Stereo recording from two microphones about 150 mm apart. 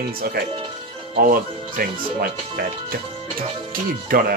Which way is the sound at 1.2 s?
75° right (ahead or behind).